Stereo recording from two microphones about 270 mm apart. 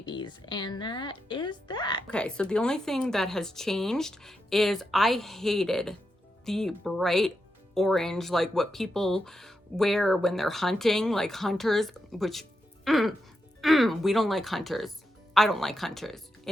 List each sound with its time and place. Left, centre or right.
0.0 s a woman's voice: centre
2.0 s speech: centre